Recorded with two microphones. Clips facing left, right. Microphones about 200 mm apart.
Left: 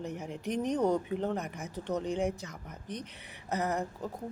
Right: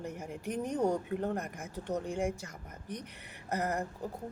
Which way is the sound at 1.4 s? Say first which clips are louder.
Left 2 dB; 65° left (ahead or behind).